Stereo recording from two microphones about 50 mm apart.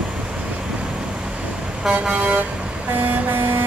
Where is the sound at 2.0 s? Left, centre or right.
Right.